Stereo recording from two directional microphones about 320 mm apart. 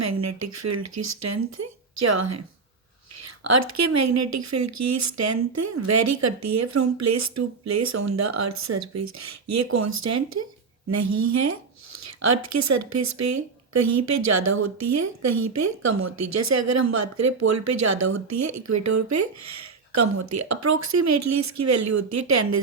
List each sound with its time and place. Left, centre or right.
0.0 s a woman's voice: right
3.4 s a woman's voice: right